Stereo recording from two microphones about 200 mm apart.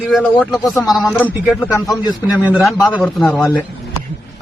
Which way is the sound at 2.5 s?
Centre (ahead or behind).